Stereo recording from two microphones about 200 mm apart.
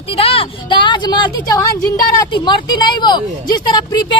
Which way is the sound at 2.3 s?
25° left (ahead or behind).